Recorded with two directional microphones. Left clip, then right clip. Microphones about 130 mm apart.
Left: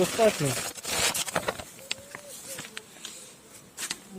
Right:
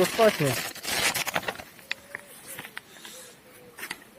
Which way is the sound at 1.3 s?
70° left (ahead or behind).